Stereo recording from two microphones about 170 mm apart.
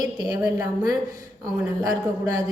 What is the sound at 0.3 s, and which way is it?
Speech, 20° right (ahead or behind).